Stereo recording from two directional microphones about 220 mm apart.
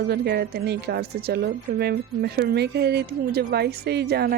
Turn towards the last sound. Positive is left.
turn(degrees=-45)  # may be behind; listen again after turning